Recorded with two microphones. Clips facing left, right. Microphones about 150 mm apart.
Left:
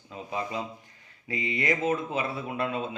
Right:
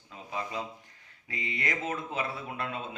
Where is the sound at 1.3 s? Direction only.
15° left (ahead or behind).